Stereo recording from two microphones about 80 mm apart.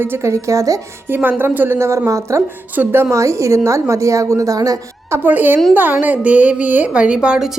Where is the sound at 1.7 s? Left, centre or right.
Right.